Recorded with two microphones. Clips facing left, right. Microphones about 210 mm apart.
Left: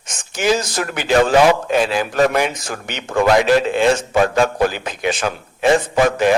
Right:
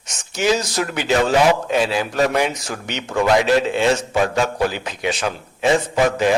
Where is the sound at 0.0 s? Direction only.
50° left (ahead or behind).